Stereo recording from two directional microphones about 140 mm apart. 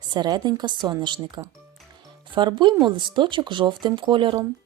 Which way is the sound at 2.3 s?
35° right (ahead or behind).